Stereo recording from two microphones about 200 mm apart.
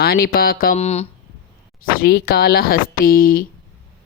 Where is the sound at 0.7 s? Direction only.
35° left (ahead or behind).